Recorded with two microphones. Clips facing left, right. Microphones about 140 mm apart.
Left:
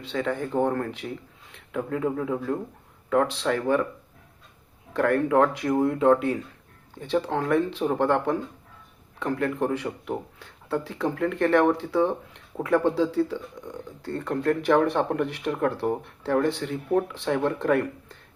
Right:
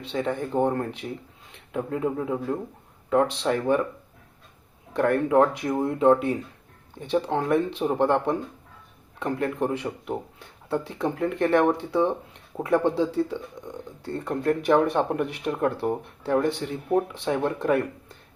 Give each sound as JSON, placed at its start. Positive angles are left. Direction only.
{"t": 0.0, "sound": "speech", "side_deg": -20}
{"t": 4.9, "sound": "speech", "side_deg": -20}